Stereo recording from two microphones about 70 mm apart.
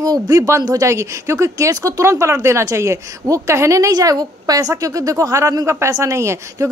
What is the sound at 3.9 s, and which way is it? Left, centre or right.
A woman's voice, right.